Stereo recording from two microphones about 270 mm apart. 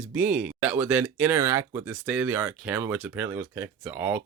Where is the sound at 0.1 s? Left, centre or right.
Centre.